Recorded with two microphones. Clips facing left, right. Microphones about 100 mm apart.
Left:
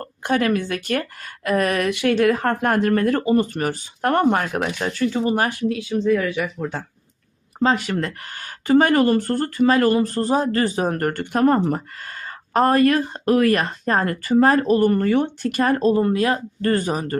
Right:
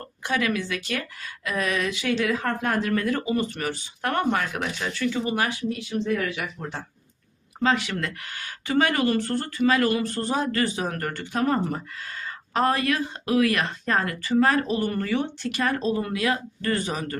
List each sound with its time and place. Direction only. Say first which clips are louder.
0.0 s speech: left 6 dB; 45° left (ahead or behind)
7.6 s speech: left 4 dB; 40° left (ahead or behind)